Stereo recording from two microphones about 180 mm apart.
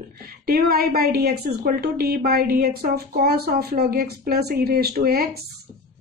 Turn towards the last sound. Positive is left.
turn(degrees=-55)  # may be behind; listen again after turning